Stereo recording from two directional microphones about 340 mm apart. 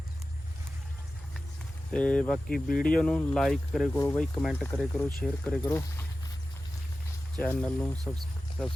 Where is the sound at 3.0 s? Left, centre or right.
Centre.